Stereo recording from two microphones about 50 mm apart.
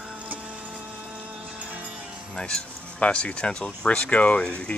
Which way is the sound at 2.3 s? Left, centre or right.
Centre.